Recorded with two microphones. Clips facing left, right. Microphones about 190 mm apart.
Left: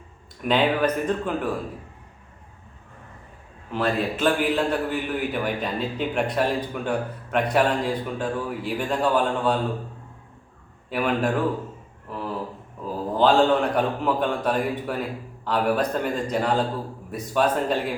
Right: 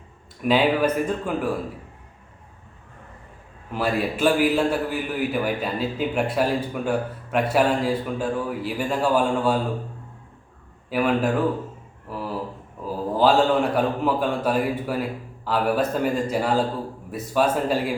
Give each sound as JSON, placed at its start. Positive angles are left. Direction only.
{"t": 0.4, "sound": "speech", "side_deg": -5}
{"t": 3.7, "sound": "a man's voice", "side_deg": -10}
{"t": 10.8, "sound": "a man's voice", "side_deg": -5}
{"t": 12.0, "sound": "a sound", "side_deg": -5}
{"t": 12.8, "sound": "a man's voice", "side_deg": -5}